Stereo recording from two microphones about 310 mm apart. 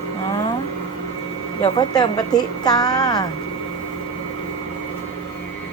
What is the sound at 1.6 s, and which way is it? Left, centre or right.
Speech, centre.